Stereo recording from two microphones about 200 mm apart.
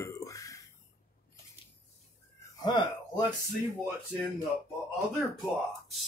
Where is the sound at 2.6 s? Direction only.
20° left (ahead or behind).